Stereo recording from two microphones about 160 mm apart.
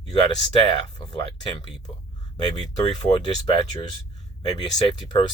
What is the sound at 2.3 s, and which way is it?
Speech, 25° left (ahead or behind).